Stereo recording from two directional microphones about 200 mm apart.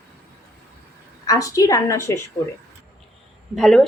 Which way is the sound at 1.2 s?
15° left (ahead or behind).